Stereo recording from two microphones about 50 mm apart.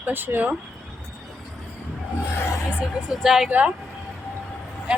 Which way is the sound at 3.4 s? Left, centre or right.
Right.